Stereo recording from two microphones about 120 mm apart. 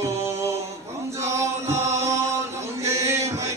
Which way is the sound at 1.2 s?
25° right (ahead or behind).